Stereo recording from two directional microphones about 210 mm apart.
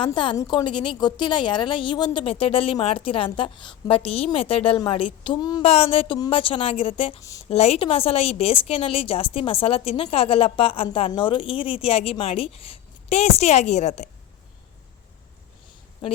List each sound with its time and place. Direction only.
0.0 s a woman's voice: 25° left (ahead or behind)
7.4 s a woman's voice: 30° left (ahead or behind)